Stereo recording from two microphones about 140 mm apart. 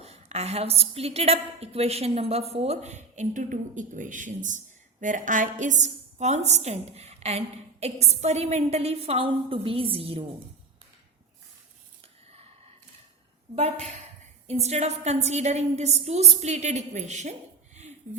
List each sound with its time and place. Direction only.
0.0 s a woman's voice: 50° right (ahead or behind)
13.6 s a woman's voice: 50° right (ahead or behind)